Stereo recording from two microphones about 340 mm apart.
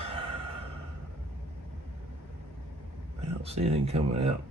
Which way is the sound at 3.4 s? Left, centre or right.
Centre.